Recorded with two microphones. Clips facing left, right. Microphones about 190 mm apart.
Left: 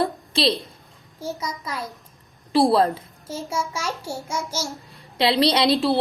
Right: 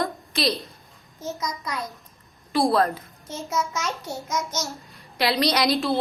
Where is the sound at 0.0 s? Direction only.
30° left (ahead or behind).